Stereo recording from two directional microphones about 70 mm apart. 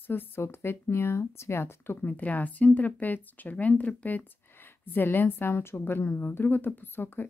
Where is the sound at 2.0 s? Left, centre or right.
Left.